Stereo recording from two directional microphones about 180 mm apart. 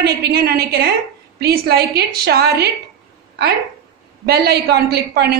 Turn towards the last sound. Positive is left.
turn(degrees=-60)  # may be behind; listen again after turning